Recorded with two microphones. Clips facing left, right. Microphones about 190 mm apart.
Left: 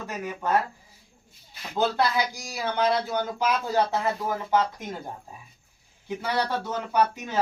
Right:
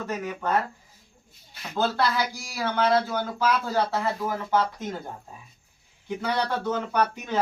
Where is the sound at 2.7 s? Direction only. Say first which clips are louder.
Right 1 dB; 15° left (ahead or behind).